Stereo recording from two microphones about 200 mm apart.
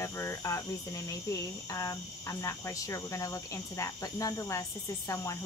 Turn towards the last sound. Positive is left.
turn(degrees=15)  # may be behind; listen again after turning